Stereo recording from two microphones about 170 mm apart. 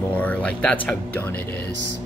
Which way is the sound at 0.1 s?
10° left (ahead or behind).